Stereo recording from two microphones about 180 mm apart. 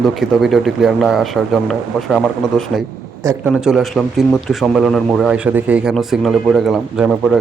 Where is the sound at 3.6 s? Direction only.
Centre (ahead or behind).